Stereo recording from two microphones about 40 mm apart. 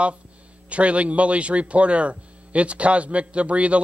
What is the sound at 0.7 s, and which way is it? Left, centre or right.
Speech, right.